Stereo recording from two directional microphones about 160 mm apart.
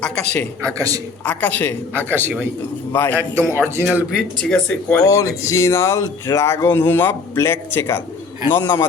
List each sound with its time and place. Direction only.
0.6 s a man's voice: 20° right (ahead or behind)
1.2 s speech: 10° left (ahead or behind)
3.2 s a man's voice: 15° right (ahead or behind)
3.9 s speech: centre (ahead or behind)
4.9 s speech: 20° left (ahead or behind)